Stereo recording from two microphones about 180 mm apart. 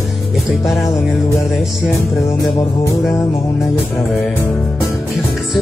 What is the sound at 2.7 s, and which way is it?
Music, 25° left (ahead or behind).